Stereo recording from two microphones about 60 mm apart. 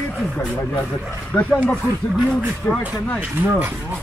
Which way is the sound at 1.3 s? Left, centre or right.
Centre.